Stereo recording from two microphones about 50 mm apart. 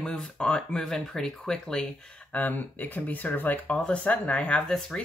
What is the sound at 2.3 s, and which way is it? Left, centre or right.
Speech, left.